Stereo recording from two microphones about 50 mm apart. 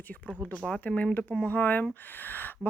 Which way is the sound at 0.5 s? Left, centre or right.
Centre.